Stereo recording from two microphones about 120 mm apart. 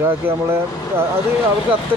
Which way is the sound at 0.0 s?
20° right (ahead or behind).